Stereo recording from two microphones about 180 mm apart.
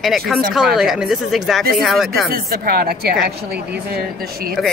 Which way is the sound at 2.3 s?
60° right (ahead or behind).